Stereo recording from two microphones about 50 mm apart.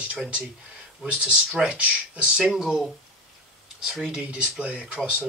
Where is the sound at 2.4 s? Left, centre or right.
Centre.